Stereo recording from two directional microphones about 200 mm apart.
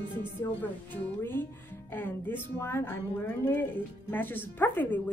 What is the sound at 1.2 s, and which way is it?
Speech, 10° left (ahead or behind).